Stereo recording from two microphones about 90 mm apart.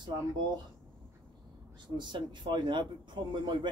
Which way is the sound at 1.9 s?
60° right (ahead or behind).